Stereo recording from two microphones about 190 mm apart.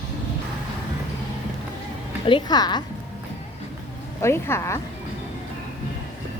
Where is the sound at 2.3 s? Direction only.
25° left (ahead or behind).